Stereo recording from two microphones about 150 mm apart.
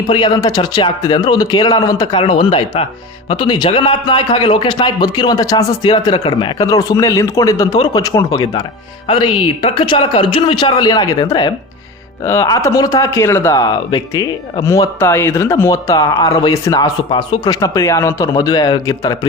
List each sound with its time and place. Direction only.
0.1 s speech: 30° left (ahead or behind)
2.1 s speech: 35° left (ahead or behind)